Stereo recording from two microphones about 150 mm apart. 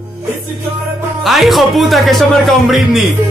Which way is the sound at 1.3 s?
Centre (ahead or behind).